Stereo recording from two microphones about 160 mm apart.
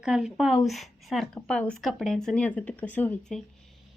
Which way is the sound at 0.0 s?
5° right (ahead or behind).